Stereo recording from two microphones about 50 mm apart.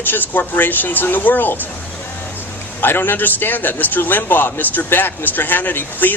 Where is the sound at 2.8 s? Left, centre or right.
Left.